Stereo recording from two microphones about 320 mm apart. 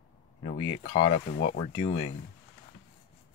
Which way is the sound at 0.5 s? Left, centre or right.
Left.